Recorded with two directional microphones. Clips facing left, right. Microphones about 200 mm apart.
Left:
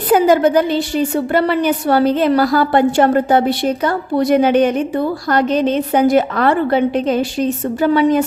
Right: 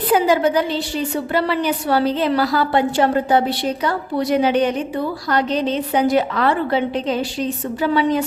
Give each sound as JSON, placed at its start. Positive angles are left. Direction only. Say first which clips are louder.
{"t": 0.1, "sound": "a woman's voice", "louder": "left 5 dB", "side_deg": 45}